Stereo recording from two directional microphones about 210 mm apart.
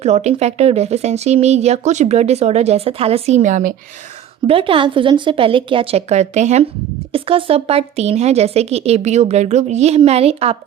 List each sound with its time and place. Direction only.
0.0 s speech: 30° right (ahead or behind)
4.4 s speech: 25° right (ahead or behind)